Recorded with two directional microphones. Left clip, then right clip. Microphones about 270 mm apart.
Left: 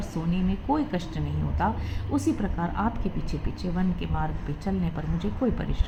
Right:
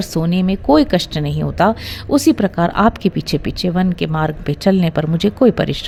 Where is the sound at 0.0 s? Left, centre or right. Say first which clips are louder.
Right 12 dB; right.